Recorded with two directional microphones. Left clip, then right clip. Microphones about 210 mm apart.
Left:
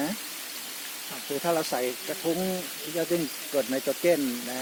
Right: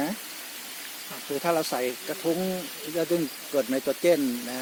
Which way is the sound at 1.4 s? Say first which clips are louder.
Right 1 dB; 40° right (ahead or behind).